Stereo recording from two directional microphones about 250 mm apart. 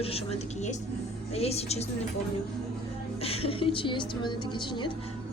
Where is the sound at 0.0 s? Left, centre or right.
Left.